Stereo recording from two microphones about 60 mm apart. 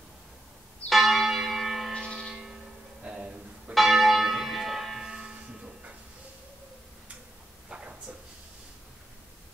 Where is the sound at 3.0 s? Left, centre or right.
Centre.